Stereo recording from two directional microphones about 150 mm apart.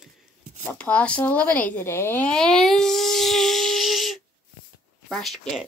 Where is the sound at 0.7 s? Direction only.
10° left (ahead or behind).